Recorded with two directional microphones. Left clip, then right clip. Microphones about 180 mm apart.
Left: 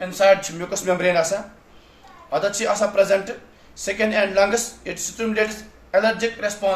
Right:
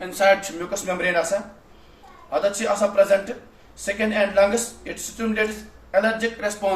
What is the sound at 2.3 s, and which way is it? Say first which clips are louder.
Speech: left 1 dB; 45° left (ahead or behind).